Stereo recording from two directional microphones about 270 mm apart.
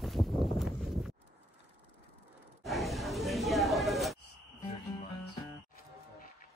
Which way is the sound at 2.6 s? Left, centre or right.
Centre.